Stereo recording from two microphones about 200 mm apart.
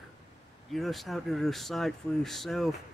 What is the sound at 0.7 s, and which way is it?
Speech, centre (ahead or behind).